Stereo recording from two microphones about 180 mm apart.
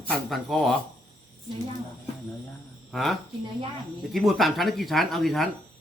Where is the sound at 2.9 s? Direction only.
Centre (ahead or behind).